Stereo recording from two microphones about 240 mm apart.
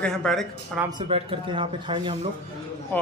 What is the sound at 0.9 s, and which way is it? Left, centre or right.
Speech, right.